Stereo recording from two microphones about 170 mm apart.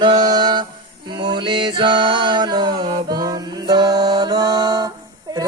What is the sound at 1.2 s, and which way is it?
Music, 25° right (ahead or behind).